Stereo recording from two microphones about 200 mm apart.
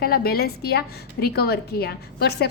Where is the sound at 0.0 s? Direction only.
50° left (ahead or behind).